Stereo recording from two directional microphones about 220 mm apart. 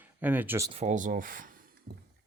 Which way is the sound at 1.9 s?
45° right (ahead or behind).